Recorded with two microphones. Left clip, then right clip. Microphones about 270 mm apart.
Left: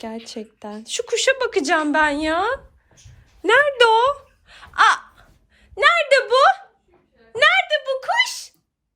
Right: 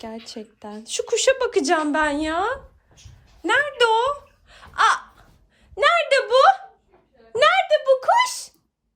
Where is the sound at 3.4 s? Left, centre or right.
Centre; by 8.5 s right.